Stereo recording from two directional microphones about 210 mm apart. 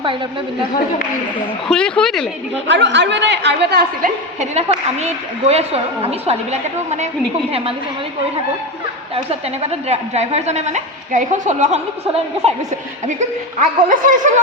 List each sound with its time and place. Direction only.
1.6 s speech: 5° left (ahead or behind)
2.6 s a woman's voice: 55° right (ahead or behind)
4.4 s a woman's voice: 30° right (ahead or behind)
9.1 s a woman's voice: 30° right (ahead or behind)
13.1 s a woman's voice: 35° right (ahead or behind)